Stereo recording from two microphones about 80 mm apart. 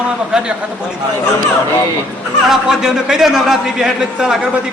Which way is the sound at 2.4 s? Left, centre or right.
Centre.